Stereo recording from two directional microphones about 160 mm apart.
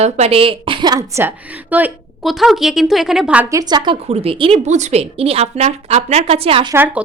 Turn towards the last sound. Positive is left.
turn(degrees=-10)  # may be behind; listen again after turning